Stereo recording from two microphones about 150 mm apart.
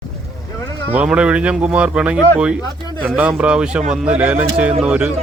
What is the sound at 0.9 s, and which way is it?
A man's voice, 10° right (ahead or behind).